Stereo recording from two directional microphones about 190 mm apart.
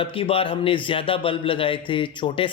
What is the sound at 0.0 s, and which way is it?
Speech, 30° left (ahead or behind).